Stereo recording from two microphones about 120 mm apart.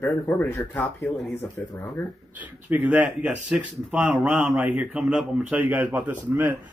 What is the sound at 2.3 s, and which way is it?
A man's voice, 15° right (ahead or behind).